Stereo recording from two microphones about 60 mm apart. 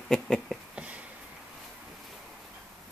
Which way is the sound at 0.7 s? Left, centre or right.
Right.